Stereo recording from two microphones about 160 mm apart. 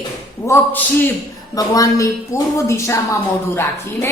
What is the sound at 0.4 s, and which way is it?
A woman's voice, 15° left (ahead or behind).